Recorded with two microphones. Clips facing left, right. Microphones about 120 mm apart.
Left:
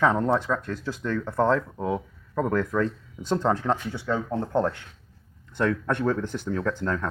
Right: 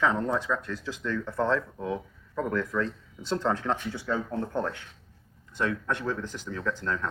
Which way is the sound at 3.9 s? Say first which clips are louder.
Left 3 dB; 70° left (ahead or behind).